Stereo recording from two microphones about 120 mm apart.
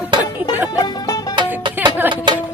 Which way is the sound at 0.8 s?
30° left (ahead or behind).